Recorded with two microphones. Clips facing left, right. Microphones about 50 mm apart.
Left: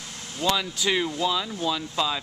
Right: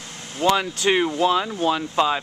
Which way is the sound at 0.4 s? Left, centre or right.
Right.